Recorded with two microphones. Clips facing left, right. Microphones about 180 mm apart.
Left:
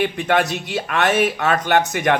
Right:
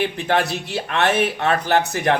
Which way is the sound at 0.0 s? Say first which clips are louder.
Left 2 dB; 30° right (ahead or behind).